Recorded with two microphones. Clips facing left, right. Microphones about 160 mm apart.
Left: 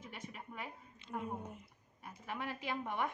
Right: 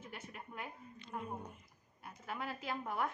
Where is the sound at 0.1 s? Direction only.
Centre (ahead or behind).